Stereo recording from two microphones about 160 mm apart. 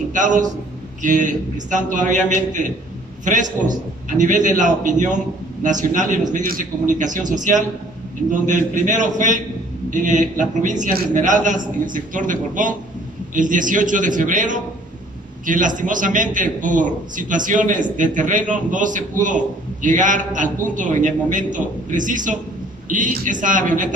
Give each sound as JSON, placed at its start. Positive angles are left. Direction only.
{"t": 0.1, "sound": "a man's voice", "side_deg": -50}